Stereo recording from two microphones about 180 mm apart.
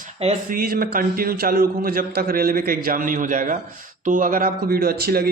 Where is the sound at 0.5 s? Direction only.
55° right (ahead or behind).